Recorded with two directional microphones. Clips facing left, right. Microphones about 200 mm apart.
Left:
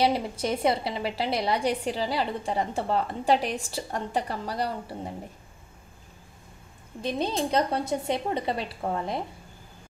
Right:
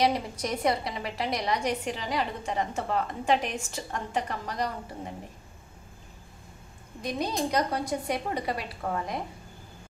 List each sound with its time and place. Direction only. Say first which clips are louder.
0.0 s a woman's voice: left 2 dB; 30° left (ahead or behind)
7.0 s a woman's voice: left 2 dB; 25° left (ahead or behind)